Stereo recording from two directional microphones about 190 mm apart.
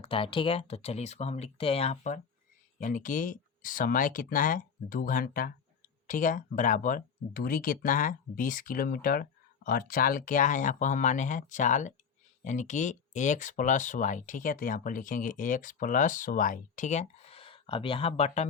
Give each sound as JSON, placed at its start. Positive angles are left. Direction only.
{"t": 0.0, "sound": "speech", "side_deg": 30}